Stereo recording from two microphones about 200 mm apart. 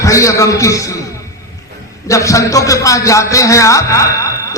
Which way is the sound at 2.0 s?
15° left (ahead or behind).